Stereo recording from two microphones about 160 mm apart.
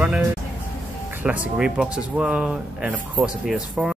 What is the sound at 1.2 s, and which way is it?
Speech, 10° right (ahead or behind).